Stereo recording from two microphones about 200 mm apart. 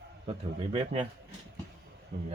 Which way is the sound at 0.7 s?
25° right (ahead or behind).